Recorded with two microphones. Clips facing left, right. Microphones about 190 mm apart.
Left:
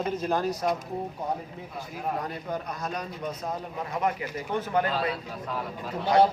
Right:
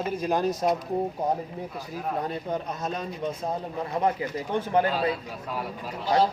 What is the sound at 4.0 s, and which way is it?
Speech, 30° right (ahead or behind).